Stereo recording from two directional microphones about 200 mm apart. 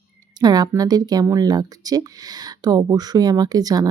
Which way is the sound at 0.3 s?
20° right (ahead or behind).